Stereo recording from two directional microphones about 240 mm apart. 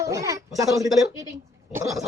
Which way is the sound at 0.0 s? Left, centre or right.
Centre.